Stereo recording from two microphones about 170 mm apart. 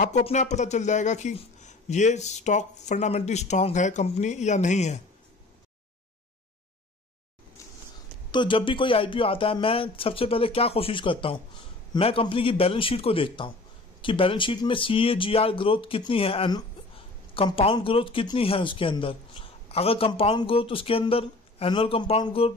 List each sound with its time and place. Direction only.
0.0 s speech: 45° left (ahead or behind)
8.3 s speech: 30° left (ahead or behind)